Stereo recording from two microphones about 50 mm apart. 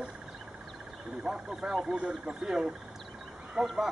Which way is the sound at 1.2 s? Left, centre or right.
Centre.